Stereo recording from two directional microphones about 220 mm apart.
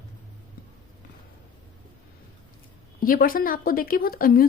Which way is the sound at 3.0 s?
40° left (ahead or behind).